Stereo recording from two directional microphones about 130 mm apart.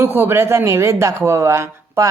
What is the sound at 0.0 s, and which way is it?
Speech, 15° right (ahead or behind).